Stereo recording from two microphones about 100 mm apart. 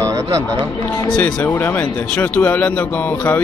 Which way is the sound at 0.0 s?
30° right (ahead or behind).